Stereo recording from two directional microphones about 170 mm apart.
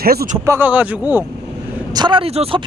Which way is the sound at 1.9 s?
25° right (ahead or behind).